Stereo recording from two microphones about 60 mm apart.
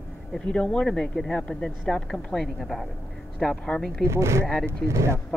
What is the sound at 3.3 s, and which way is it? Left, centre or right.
Speech, centre.